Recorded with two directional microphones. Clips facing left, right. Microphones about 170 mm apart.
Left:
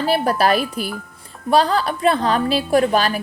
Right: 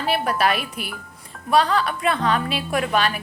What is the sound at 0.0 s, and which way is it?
Speech, 35° left (ahead or behind).